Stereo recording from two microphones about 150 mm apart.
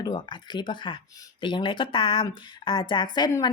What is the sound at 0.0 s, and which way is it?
A woman's voice, 30° left (ahead or behind).